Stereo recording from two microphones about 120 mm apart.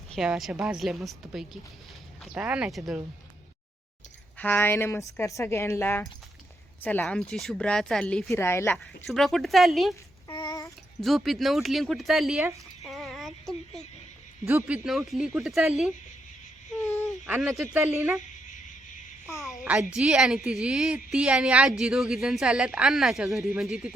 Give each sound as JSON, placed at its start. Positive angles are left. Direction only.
{"t": 0.2, "sound": "a woman's voice", "side_deg": -5}
{"t": 4.4, "sound": "a woman's voice", "side_deg": 15}
{"t": 7.0, "sound": "a woman's voice", "side_deg": 5}
{"t": 8.4, "sound": "a woman's voice", "side_deg": 20}
{"t": 8.7, "sound": "a woman's voice", "side_deg": 0}
{"t": 10.2, "sound": "child singing", "side_deg": 40}
{"t": 11.0, "sound": "a woman's voice", "side_deg": 0}
{"t": 12.8, "sound": "a sound", "side_deg": 0}
{"t": 14.4, "sound": "speech", "side_deg": -20}
{"t": 14.8, "sound": "a woman's voice", "side_deg": 0}
{"t": 17.4, "sound": "a woman's voice", "side_deg": 0}
{"t": 19.6, "sound": "a woman's voice", "side_deg": -5}